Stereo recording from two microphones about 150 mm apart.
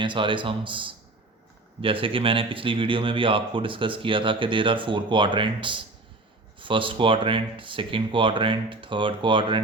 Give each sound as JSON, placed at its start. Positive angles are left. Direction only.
{"t": 0.0, "sound": "speech", "side_deg": -30}